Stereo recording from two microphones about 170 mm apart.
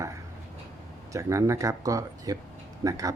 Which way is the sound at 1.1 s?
20° right (ahead or behind).